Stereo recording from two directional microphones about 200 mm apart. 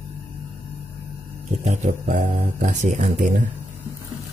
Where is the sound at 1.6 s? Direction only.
35° right (ahead or behind).